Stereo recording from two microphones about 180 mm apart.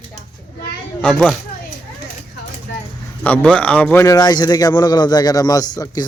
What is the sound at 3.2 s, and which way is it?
A man's voice, 5° left (ahead or behind).